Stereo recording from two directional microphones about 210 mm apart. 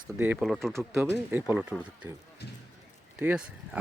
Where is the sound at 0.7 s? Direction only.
15° right (ahead or behind).